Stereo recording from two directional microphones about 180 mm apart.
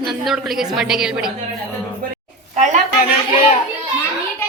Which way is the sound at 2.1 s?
40° right (ahead or behind).